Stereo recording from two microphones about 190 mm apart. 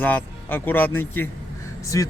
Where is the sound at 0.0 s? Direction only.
10° left (ahead or behind).